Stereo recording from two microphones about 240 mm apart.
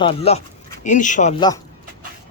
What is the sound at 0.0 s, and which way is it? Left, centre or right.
Speech, left.